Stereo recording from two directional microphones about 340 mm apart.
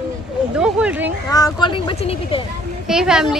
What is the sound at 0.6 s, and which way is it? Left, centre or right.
Speech, centre.